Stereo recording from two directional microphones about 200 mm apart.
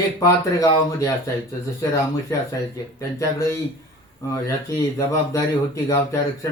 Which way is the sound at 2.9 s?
15° left (ahead or behind).